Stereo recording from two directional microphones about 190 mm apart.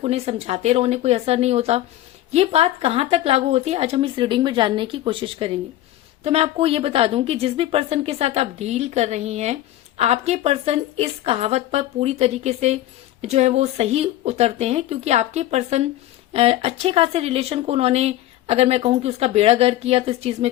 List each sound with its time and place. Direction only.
0.0 s speech: 30° right (ahead or behind)